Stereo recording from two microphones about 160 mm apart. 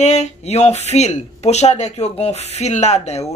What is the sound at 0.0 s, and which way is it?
Speech, 45° left (ahead or behind).